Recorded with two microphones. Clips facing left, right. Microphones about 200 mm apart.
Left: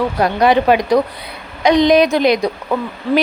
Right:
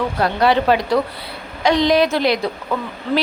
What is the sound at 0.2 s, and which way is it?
A woman's voice, 15° left (ahead or behind).